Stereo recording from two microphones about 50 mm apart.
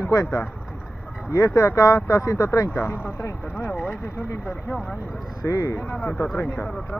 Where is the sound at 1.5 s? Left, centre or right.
Left.